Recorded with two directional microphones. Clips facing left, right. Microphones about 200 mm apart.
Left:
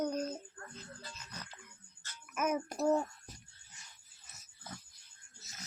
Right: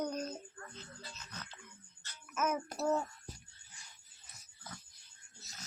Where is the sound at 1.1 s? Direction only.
10° left (ahead or behind).